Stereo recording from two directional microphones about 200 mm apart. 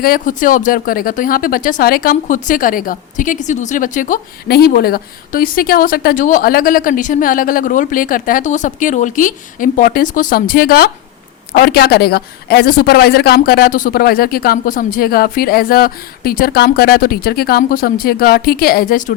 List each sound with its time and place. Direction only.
0.0 s speech: 45° left (ahead or behind)